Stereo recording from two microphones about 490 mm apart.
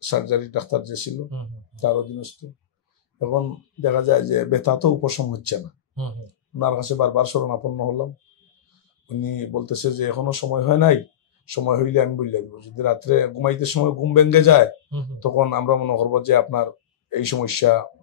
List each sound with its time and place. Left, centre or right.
0.0 s speech: left
3.8 s speech: left
9.2 s speech: left